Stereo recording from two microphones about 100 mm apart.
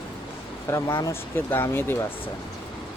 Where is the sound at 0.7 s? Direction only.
25° left (ahead or behind).